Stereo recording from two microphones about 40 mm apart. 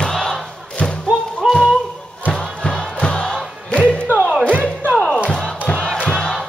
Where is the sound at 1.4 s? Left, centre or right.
Centre.